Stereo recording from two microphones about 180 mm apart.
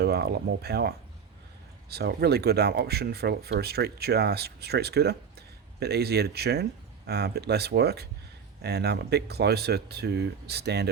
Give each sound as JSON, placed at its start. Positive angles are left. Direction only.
{"t": 0.0, "sound": "speech", "side_deg": -65}